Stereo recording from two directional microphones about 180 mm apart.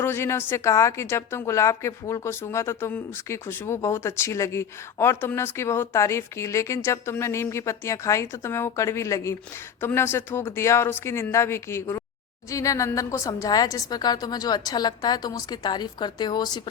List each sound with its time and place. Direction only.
0.0 s a woman's voice: 15° left (ahead or behind)